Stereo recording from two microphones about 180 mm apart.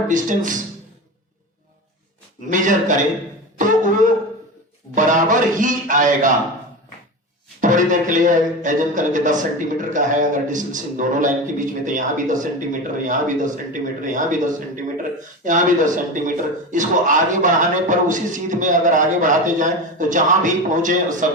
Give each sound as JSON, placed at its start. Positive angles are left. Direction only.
{"t": 0.1, "sound": "a man's voice", "side_deg": -45}
{"t": 2.5, "sound": "a man's voice", "side_deg": -45}
{"t": 7.6, "sound": "a man's voice", "side_deg": -45}
{"t": 15.4, "sound": "a man's voice", "side_deg": -45}